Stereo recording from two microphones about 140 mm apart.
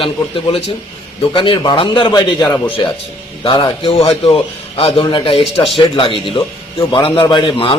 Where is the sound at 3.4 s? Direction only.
35° left (ahead or behind).